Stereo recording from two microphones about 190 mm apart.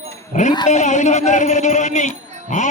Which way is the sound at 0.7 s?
40° left (ahead or behind).